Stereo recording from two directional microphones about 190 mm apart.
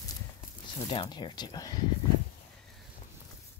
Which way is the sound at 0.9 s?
25° left (ahead or behind).